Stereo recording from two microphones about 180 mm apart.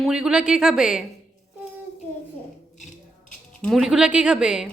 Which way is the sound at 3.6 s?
Centre (ahead or behind).